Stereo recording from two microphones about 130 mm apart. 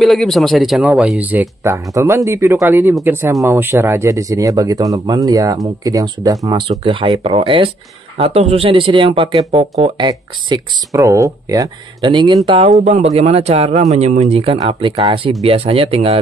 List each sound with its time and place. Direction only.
0.0 s speech: centre (ahead or behind); by 6.6 s 30° right (ahead or behind)
6.7 s speech: 40° right (ahead or behind)
9.9 s speech: 35° right (ahead or behind)
12.4 s speech: 50° right (ahead or behind)